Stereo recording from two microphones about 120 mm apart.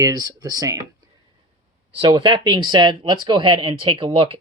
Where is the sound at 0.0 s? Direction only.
35° right (ahead or behind).